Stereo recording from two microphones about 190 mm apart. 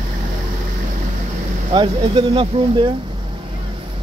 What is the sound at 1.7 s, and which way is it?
Speech, 30° right (ahead or behind).